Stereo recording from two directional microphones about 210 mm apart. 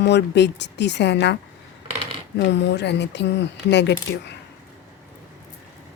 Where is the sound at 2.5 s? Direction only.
55° left (ahead or behind).